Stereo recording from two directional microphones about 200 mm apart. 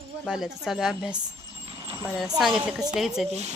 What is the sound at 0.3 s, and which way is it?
Speech, centre (ahead or behind).